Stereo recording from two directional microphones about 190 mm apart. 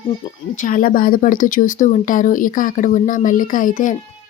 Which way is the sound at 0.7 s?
45° left (ahead or behind).